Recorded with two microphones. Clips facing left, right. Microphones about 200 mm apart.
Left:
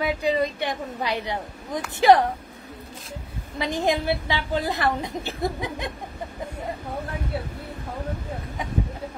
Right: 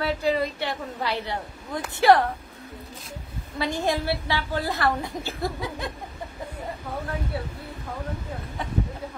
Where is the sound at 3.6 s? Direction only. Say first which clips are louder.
Left 2 dB; 15° left (ahead or behind).